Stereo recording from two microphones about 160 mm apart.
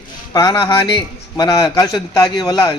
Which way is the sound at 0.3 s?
20° left (ahead or behind).